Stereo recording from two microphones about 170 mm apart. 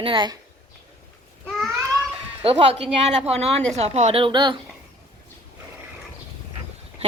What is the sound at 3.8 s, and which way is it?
Speech, 40° right (ahead or behind).